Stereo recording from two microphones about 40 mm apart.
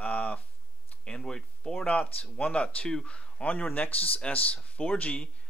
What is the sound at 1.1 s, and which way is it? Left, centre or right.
Speech, left.